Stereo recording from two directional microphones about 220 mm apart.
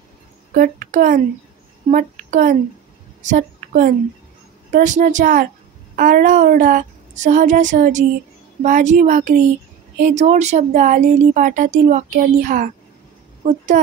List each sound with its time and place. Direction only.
0.6 s speech: 40° right (ahead or behind)
3.2 s a sound: 35° right (ahead or behind)
4.7 s speech: 35° right (ahead or behind)